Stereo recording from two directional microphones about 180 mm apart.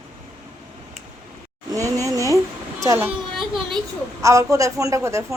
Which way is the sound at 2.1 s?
20° right (ahead or behind).